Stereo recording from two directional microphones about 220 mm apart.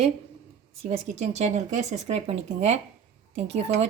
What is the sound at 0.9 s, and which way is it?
A woman's voice, 30° right (ahead or behind).